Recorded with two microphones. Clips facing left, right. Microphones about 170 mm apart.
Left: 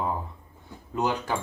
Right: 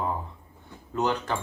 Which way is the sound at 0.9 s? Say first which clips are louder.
Even; 10° left (ahead or behind).